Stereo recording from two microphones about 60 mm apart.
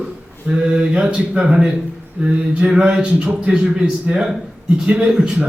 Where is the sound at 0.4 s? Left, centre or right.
Centre.